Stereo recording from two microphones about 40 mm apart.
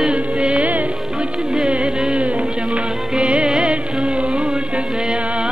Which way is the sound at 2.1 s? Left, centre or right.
Right.